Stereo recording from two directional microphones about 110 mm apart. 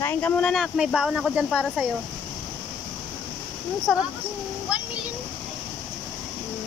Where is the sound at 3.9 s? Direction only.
5° left (ahead or behind).